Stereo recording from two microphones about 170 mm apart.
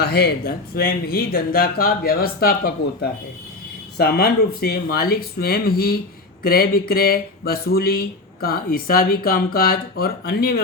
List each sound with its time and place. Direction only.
0.0 s speech: 65° left (ahead or behind)